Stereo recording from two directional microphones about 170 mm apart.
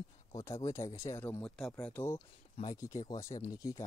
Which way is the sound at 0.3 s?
20° left (ahead or behind).